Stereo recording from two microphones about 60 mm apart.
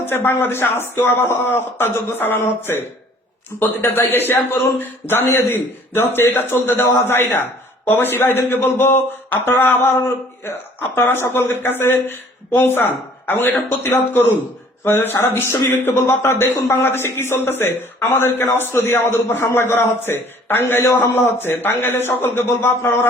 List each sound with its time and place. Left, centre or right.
0.0 s a man's voice: left
3.8 s a man's voice: left